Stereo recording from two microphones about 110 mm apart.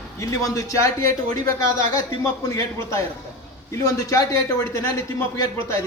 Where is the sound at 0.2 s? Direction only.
30° left (ahead or behind).